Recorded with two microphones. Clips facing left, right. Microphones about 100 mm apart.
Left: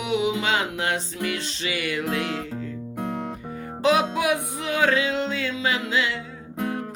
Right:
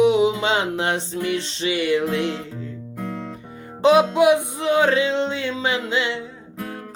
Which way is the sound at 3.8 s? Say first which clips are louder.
Right 6 dB; 25° right (ahead or behind).